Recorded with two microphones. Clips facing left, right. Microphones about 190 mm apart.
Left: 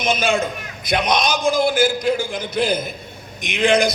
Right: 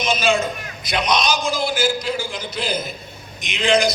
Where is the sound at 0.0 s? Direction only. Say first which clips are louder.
Even; 55° left (ahead or behind).